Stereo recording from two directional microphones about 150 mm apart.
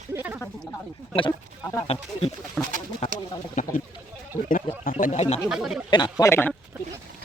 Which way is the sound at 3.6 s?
55° left (ahead or behind).